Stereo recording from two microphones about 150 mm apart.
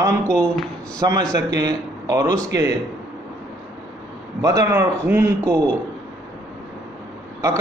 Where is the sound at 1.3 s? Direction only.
25° right (ahead or behind).